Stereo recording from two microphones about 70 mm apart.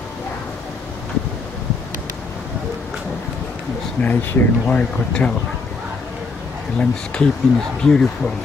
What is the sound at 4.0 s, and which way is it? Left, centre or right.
Speech, left.